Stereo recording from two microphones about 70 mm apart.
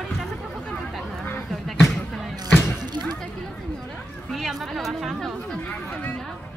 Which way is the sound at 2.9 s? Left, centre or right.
Right.